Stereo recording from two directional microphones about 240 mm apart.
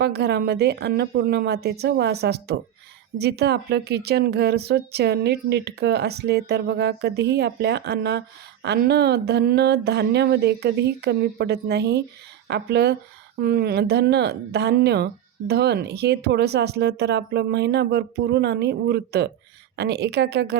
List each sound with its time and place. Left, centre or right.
0.0 s speech: right